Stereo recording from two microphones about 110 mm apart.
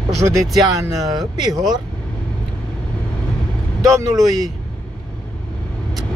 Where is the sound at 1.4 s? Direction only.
35° right (ahead or behind).